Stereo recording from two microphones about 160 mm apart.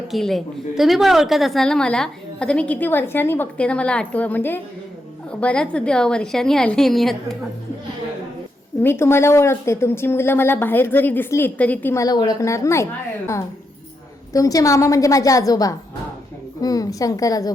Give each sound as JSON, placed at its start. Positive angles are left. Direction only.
{"t": 0.1, "sound": "a woman's voice", "side_deg": 0}
{"t": 8.8, "sound": "a woman's voice", "side_deg": 15}